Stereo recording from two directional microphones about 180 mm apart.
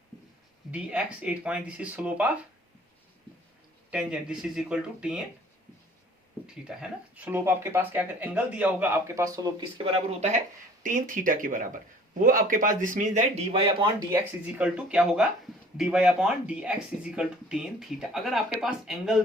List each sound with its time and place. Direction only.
0.7 s speech: 5° right (ahead or behind)
3.9 s speech: 5° right (ahead or behind)
6.7 s speech: 5° right (ahead or behind); by 10.2 s 35° right (ahead or behind)
10.8 s speech: 50° right (ahead or behind); by 13.9 s 30° right (ahead or behind)
14.1 s speech: 10° right (ahead or behind)